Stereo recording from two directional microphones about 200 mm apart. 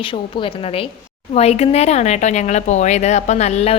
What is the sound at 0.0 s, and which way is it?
A woman's voice, 25° left (ahead or behind).